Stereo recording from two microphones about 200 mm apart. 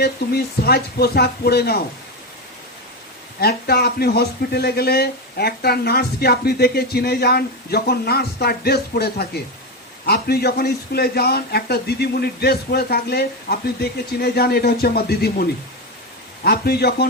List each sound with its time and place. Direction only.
0.0 s speech: 50° left (ahead or behind)
3.4 s speech: 50° left (ahead or behind)